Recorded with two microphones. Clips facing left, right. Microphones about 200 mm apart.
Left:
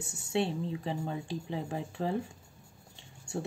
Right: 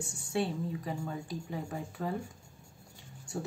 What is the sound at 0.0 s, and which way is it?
Speech, 25° left (ahead or behind).